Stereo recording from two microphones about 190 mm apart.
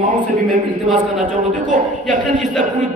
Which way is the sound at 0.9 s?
45° right (ahead or behind).